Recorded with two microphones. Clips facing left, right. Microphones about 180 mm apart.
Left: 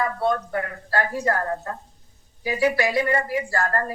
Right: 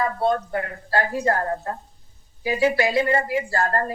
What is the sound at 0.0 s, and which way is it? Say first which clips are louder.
A woman's voice: right 1 dB; 30° right (ahead or behind).